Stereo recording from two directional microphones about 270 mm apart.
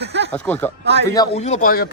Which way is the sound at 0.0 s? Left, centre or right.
Right.